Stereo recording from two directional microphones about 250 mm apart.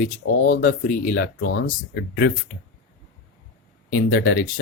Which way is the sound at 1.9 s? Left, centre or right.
Left.